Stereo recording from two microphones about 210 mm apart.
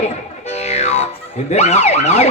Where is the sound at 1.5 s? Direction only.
35° left (ahead or behind).